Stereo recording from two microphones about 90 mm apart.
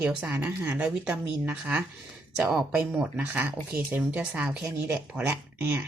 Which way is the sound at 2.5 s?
5° right (ahead or behind).